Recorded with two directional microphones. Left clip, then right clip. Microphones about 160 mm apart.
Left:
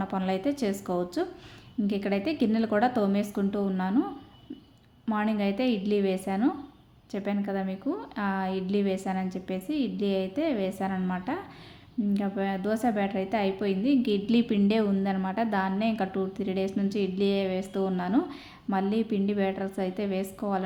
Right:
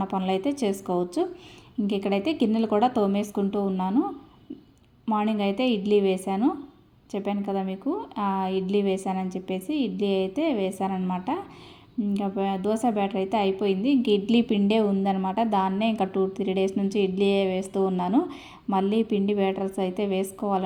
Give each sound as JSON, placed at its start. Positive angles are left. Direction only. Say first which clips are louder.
{"t": 0.0, "sound": "a woman's voice", "louder": "right 3 dB", "side_deg": -10}
{"t": 5.0, "sound": "a woman's voice", "louder": "right 3 dB", "side_deg": -15}